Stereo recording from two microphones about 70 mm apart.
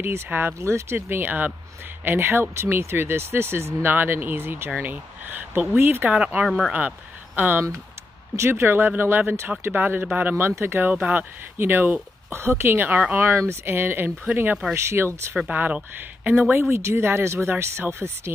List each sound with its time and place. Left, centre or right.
0.0 s speech: right
0.6 s speech: right
6.0 s speech: centre
7.3 s speech: right
14.9 s speech: right
15.5 s speech: right
16.5 s speech: right